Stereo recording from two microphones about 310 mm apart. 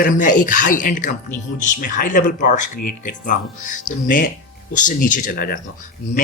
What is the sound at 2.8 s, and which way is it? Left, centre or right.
Speech, left.